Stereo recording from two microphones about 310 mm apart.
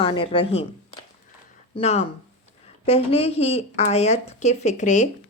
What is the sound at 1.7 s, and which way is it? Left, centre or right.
Speech, left.